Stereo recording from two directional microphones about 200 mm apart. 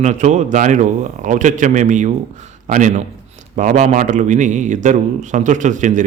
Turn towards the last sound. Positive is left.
turn(degrees=-40)  # may be behind; listen again after turning